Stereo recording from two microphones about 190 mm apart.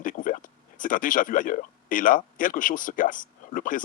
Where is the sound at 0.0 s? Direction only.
45° left (ahead or behind).